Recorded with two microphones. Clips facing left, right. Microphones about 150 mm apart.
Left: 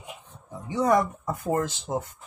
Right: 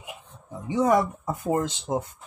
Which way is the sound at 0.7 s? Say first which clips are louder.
Right 1 dB; 10° right (ahead or behind).